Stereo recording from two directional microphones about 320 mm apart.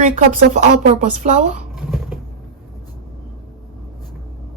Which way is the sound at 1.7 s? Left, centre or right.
Centre.